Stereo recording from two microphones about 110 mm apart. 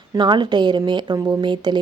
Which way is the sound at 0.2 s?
45° right (ahead or behind).